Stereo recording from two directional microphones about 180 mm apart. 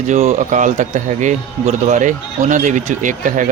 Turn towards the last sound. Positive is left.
turn(degrees=-45)  # may be behind; listen again after turning